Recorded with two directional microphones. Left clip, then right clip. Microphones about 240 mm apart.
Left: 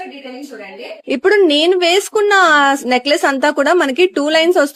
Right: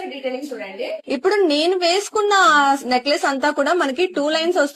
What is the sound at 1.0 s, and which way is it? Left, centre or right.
Speech, left.